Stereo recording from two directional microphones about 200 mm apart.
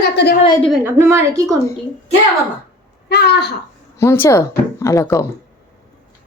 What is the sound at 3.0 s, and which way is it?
Speech, 55° left (ahead or behind).